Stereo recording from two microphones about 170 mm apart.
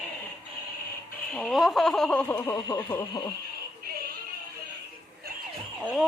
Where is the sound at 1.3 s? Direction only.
Centre (ahead or behind).